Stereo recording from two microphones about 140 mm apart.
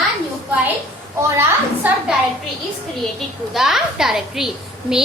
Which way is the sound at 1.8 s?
10° right (ahead or behind).